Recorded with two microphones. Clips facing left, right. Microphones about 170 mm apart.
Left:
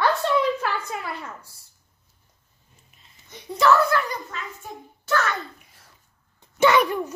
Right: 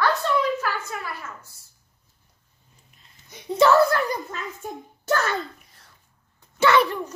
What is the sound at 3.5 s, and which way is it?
A child's voice, 30° right (ahead or behind).